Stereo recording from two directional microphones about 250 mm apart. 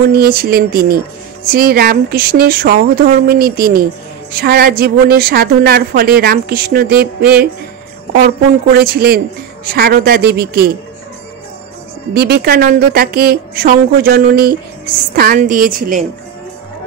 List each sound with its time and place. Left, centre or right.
0.1 s a woman's voice: right
8.7 s a woman's voice: right
12.1 s a woman's voice: right